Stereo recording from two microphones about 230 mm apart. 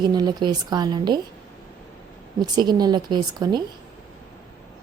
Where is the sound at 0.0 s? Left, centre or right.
Centre.